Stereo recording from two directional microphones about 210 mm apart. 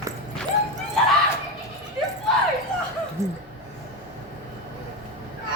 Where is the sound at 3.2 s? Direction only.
15° right (ahead or behind).